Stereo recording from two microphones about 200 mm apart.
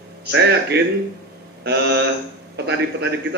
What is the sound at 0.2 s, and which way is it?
Speech, 55° right (ahead or behind).